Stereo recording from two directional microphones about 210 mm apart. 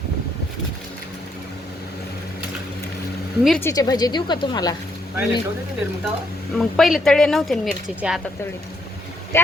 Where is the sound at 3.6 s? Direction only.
15° left (ahead or behind).